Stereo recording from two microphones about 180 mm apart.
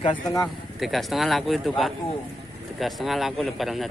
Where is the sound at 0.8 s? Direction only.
Centre (ahead or behind).